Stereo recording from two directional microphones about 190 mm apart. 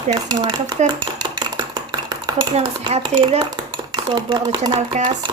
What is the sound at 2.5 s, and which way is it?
Speech, 30° right (ahead or behind).